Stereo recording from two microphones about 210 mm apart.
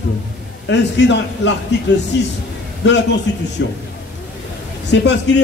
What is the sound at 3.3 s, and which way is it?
Speech, 55° left (ahead or behind).